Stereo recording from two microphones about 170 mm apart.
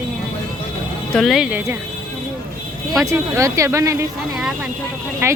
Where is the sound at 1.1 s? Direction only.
Centre (ahead or behind).